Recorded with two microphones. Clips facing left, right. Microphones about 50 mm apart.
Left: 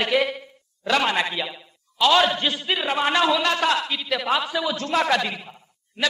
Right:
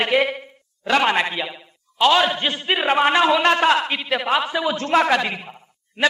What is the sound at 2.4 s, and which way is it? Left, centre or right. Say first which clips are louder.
A man's voice: right 3 dB; right.